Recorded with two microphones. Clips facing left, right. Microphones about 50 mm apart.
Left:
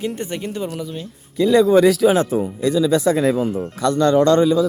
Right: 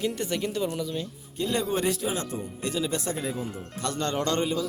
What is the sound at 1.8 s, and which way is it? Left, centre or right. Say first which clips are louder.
Speech: left 14 dB; left.